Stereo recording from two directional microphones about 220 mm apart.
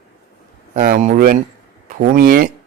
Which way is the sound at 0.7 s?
40° right (ahead or behind).